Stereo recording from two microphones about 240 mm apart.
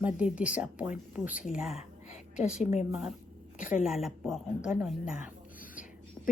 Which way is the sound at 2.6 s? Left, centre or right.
Left.